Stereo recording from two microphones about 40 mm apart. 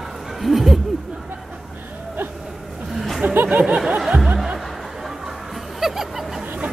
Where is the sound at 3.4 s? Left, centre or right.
Right.